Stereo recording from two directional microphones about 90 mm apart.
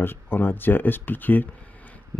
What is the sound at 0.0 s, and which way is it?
Speech, 25° left (ahead or behind).